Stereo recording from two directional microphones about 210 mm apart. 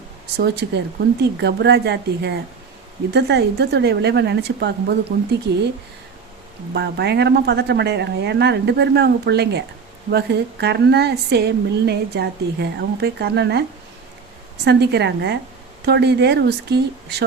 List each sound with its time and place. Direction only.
0.3 s a woman's voice: 50° right (ahead or behind)
6.7 s a woman's voice: 55° right (ahead or behind)